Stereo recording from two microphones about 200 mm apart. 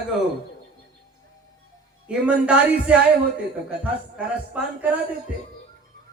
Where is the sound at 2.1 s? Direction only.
5° right (ahead or behind).